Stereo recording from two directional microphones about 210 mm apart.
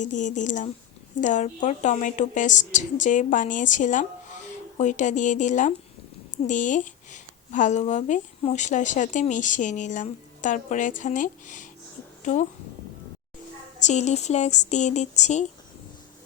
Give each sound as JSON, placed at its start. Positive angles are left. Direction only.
{"t": 0.0, "sound": "a woman's voice", "side_deg": 35}
{"t": 13.8, "sound": "speech", "side_deg": 35}